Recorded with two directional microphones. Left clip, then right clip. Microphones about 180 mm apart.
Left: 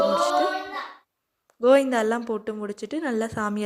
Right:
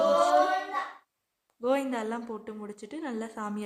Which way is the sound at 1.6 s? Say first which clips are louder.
Left 10 dB; 30° left (ahead or behind).